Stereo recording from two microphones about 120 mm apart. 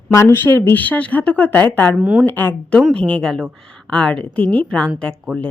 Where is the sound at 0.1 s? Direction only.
25° left (ahead or behind).